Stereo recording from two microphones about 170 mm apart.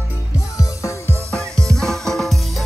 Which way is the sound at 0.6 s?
15° left (ahead or behind).